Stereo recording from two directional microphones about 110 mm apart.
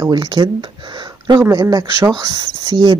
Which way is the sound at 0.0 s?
40° right (ahead or behind).